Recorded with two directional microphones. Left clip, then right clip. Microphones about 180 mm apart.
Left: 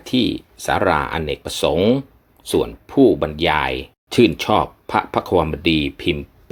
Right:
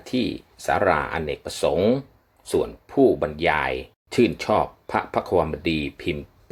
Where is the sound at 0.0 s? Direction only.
25° left (ahead or behind).